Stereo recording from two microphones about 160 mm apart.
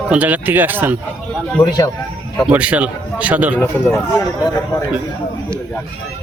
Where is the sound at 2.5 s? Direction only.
5° right (ahead or behind).